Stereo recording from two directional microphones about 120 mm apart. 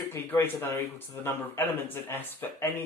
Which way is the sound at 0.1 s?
20° left (ahead or behind).